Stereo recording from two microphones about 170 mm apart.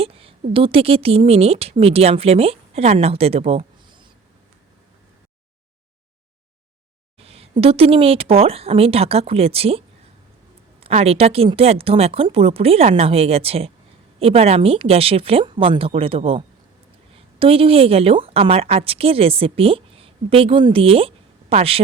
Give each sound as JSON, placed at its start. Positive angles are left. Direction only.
{"t": 0.0, "sound": "speech", "side_deg": -35}
{"t": 7.2, "sound": "a woman's voice", "side_deg": -35}
{"t": 17.4, "sound": "a woman's voice", "side_deg": -35}